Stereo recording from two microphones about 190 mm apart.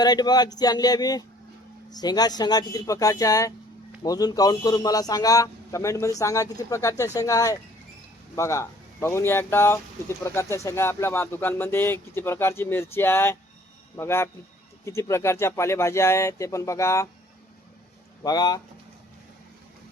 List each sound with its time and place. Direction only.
0.0 s speech: 20° left (ahead or behind)
18.2 s speech: 20° left (ahead or behind)